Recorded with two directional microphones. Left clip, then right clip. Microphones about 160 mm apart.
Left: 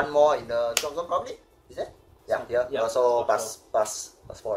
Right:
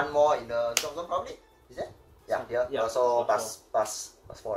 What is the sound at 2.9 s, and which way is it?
Speech, 55° left (ahead or behind).